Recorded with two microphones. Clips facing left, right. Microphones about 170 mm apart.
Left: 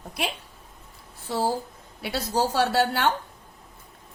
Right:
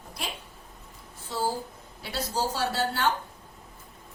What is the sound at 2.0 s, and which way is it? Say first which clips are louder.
A woman's voice: left 5 dB; 65° left (ahead or behind).